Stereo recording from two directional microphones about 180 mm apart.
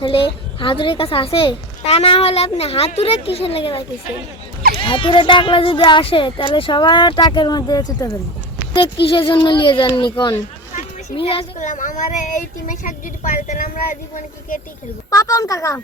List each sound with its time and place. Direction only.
0.0 s a woman's voice: 30° left (ahead or behind)
10.8 s a sound: 30° left (ahead or behind)
11.6 s a woman's voice: 45° left (ahead or behind)
15.1 s a woman's voice: 20° left (ahead or behind)